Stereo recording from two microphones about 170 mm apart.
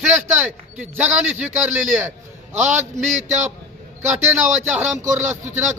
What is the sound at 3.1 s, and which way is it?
Speech, 45° right (ahead or behind).